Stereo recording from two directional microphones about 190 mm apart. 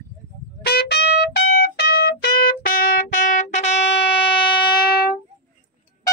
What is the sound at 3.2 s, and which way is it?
Music, 40° left (ahead or behind).